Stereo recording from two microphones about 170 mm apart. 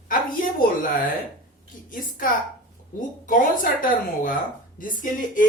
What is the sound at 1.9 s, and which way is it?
A woman's voice, 55° left (ahead or behind).